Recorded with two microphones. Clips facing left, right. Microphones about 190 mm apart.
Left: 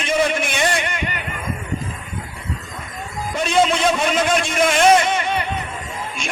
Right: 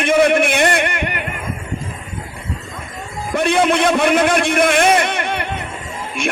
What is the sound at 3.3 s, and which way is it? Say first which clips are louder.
A man's voice: right 3 dB; 60° right (ahead or behind).